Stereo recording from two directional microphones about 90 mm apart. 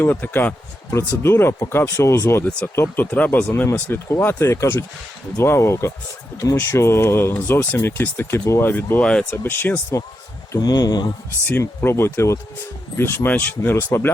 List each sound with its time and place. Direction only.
0.0 s speech: 20° left (ahead or behind)
0.9 s speech: 30° left (ahead or behind)
2.4 s speech: 15° left (ahead or behind)
10.6 s speech: 50° left (ahead or behind)
11.8 s speech: 25° left (ahead or behind)